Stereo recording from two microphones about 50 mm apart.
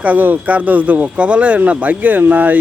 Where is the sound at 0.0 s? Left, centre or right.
Right.